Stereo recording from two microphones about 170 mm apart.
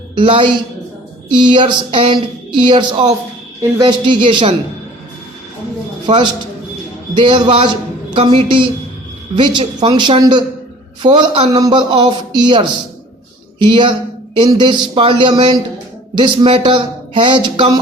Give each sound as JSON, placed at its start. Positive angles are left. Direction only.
{"t": 0.2, "sound": "a woman's voice", "side_deg": -30}
{"t": 7.2, "sound": "a man's voice", "side_deg": -25}